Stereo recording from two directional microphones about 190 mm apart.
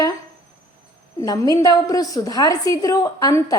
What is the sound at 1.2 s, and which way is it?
A woman's voice, 20° left (ahead or behind).